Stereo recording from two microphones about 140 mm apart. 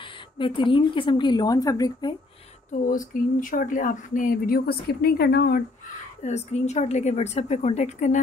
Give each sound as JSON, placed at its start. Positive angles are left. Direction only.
{"t": 0.0, "sound": "speech", "side_deg": 35}
{"t": 2.9, "sound": "speech", "side_deg": 70}
{"t": 6.2, "sound": "a woman's voice", "side_deg": 55}